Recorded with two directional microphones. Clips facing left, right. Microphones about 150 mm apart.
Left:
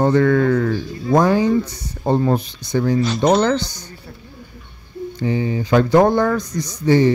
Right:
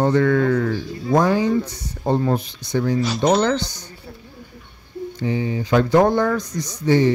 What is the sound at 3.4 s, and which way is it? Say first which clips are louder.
Speech: left 2 dB; 40° left (ahead or behind).